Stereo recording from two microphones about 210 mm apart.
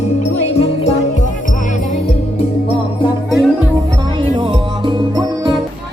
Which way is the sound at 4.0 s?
20° right (ahead or behind).